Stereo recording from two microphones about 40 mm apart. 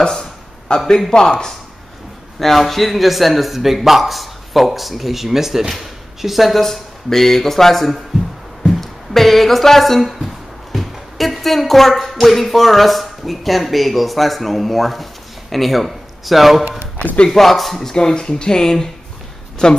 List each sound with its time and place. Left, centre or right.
0.0 s a sound: centre
1.1 s speech: centre
2.3 s a man's voice: centre
6.6 s speech: centre
17.9 s speech: centre